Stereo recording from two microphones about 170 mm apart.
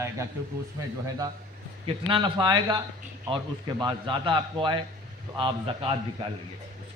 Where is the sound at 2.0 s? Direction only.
30° right (ahead or behind).